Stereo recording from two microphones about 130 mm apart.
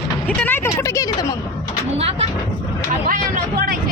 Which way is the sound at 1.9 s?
50° right (ahead or behind).